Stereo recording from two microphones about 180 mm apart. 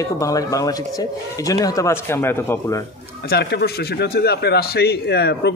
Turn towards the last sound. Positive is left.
turn(degrees=65)  # may be behind; listen again after turning